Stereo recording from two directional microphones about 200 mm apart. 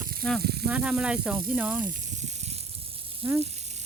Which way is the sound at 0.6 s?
5° right (ahead or behind).